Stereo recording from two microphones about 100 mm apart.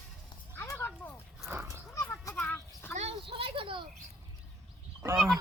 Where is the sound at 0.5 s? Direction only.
25° left (ahead or behind).